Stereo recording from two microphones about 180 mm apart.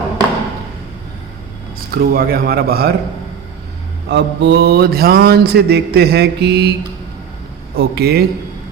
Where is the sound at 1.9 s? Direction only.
55° right (ahead or behind).